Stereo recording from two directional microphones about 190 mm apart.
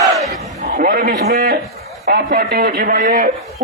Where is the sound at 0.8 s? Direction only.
50° right (ahead or behind).